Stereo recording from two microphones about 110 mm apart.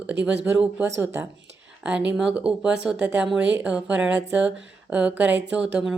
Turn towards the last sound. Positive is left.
turn(degrees=-10)  # may be behind; listen again after turning